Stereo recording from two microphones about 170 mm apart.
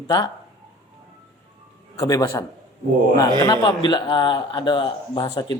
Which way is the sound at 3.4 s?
25° left (ahead or behind).